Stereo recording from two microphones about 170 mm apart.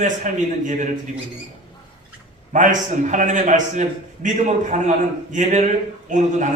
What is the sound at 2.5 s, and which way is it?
A man's voice, 50° right (ahead or behind).